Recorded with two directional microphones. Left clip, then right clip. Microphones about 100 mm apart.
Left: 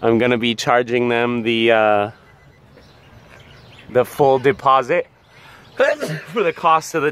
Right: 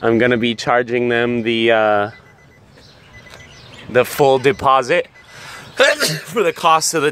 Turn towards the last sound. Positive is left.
turn(degrees=-35)  # may be behind; listen again after turning